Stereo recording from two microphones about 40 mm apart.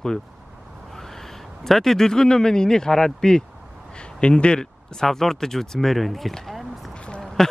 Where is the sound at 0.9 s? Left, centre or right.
Centre.